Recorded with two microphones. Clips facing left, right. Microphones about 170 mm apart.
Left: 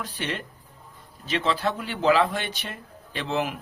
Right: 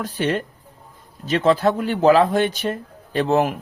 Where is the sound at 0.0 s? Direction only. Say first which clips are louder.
Right 9 dB; 45° right (ahead or behind).